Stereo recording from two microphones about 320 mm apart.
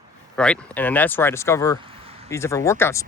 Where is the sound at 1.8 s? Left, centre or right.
Centre.